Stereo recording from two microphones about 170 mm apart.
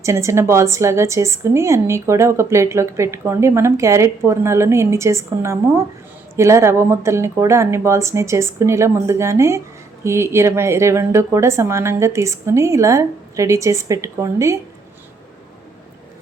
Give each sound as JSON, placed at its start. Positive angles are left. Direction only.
{"t": 0.0, "sound": "a woman's voice", "side_deg": -15}